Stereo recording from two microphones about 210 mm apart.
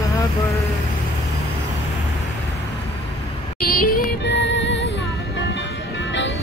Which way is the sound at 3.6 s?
45° left (ahead or behind).